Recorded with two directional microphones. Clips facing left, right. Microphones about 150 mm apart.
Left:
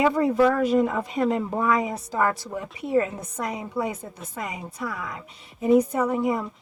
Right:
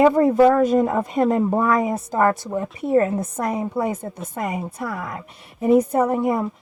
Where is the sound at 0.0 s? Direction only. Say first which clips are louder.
Right 6 dB; 50° right (ahead or behind).